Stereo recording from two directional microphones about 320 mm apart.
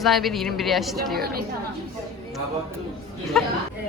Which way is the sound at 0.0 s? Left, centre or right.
Centre.